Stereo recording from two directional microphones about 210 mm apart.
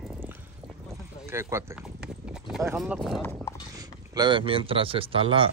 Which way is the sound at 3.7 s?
20° right (ahead or behind).